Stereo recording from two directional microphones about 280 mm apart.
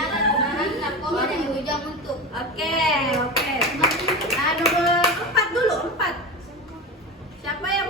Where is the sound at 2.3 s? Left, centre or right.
Centre.